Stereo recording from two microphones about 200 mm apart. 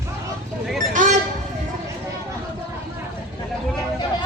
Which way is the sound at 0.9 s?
40° right (ahead or behind).